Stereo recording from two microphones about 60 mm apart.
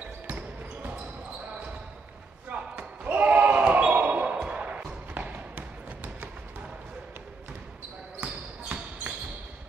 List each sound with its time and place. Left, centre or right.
2.5 s basketball bounce: right
8.2 s basketball bounce: right